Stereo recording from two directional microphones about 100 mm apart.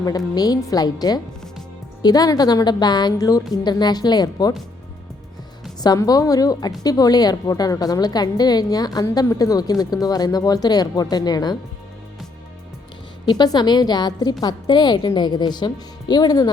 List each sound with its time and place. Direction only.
0.3 s a woman's voice: 40° left (ahead or behind)
5.8 s a woman's voice: 40° left (ahead or behind)
13.2 s a woman's voice: 45° left (ahead or behind)